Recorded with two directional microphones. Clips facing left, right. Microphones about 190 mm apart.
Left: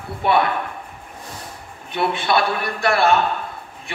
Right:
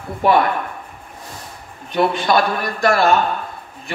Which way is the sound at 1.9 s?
40° right (ahead or behind).